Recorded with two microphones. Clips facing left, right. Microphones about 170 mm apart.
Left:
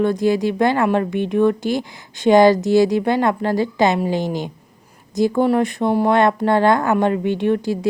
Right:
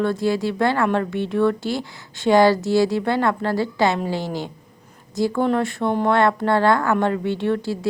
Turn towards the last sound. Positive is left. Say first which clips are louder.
# left 3 dB
turn(degrees=15)  # may be behind; listen again after turning